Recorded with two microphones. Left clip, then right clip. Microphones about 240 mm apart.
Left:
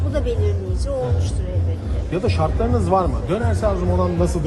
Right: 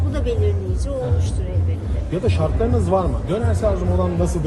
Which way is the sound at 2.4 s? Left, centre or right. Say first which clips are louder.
Even; left.